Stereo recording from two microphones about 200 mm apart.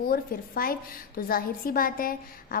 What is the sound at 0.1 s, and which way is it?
A woman's voice, 45° left (ahead or behind).